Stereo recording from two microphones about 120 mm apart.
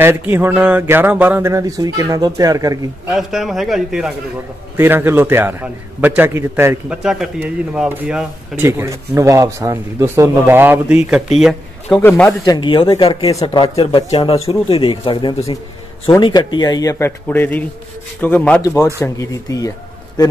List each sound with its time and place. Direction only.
0.0 s a man's voice: 20° right (ahead or behind)
1.5 s speech: 30° right (ahead or behind)
3.1 s a man's voice: 5° right (ahead or behind)
4.7 s a man's voice: 15° right (ahead or behind)
6.9 s a man's voice: 5° right (ahead or behind)
11.3 s speech: centre (ahead or behind)
12.0 s speech: 20° left (ahead or behind)
12.4 s speech: 40° left (ahead or behind)
13.3 s speech: 35° left (ahead or behind)
13.7 s speech: 50° left (ahead or behind)
17.0 s a man's voice: 15° left (ahead or behind)
18.6 s speech: 25° left (ahead or behind)